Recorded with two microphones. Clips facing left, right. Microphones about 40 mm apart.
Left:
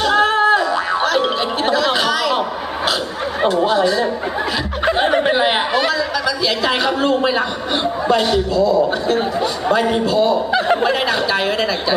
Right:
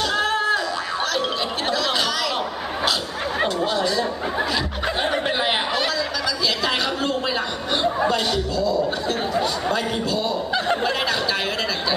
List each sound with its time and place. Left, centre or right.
0.0 s a sound: left
1.7 s chatter: centre
3.4 s speech: centre
4.9 s snicker: left
5.3 s a man's voice: centre